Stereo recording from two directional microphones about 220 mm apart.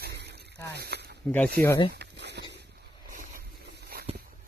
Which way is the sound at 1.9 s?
50° right (ahead or behind).